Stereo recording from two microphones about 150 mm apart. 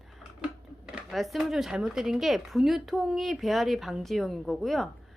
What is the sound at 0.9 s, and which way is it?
Speech, 5° right (ahead or behind).